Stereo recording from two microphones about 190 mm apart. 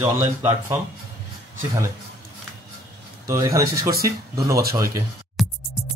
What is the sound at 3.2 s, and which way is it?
Speech, 15° right (ahead or behind).